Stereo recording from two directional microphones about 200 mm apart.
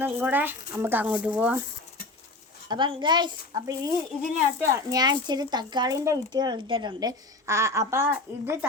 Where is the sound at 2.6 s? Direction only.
25° right (ahead or behind).